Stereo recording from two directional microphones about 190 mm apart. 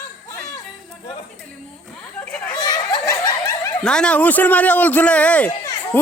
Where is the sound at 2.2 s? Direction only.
10° left (ahead or behind).